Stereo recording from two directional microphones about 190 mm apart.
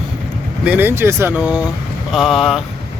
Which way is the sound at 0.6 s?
10° right (ahead or behind).